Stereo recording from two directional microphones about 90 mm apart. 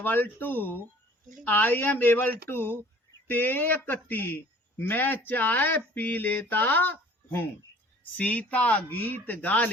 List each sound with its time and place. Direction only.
0.0 s speech: 20° left (ahead or behind)